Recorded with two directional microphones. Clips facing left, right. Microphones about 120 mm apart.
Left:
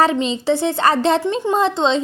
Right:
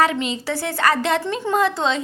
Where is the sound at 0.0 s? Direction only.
30° left (ahead or behind).